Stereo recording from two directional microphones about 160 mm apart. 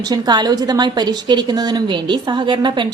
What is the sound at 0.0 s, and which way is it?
A woman's voice, 25° right (ahead or behind).